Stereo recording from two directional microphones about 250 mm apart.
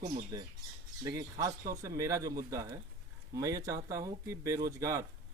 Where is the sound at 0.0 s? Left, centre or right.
Right.